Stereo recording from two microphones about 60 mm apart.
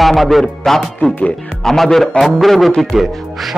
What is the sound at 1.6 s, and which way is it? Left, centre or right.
A man's voice, centre.